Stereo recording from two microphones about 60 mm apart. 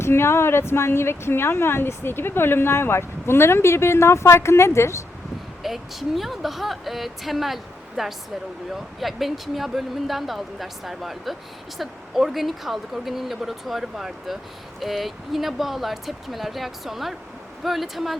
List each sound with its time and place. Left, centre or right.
0.0 s speech: left
5.6 s speech: centre